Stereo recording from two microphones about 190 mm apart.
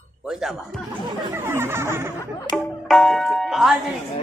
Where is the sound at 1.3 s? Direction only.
10° right (ahead or behind).